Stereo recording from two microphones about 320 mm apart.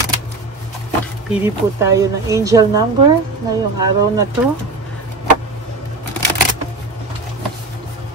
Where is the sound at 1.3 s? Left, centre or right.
Centre.